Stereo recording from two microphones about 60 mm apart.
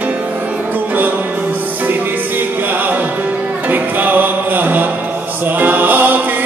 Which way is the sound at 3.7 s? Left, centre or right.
Right.